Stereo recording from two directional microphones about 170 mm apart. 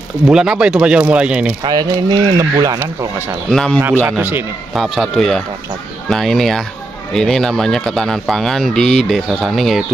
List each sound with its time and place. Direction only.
0.3 s speech: 5° right (ahead or behind)
1.6 s speech: 25° right (ahead or behind)
2.8 s speech: 15° right (ahead or behind)
3.4 s speech: 5° left (ahead or behind)
4.0 s speech: 10° right (ahead or behind)
4.7 s speech: centre (ahead or behind)